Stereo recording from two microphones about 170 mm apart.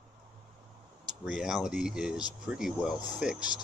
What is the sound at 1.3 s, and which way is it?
Speech, 5° right (ahead or behind).